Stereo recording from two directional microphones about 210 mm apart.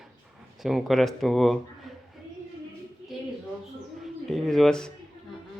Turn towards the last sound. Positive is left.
turn(degrees=5)  # may be behind; listen again after turning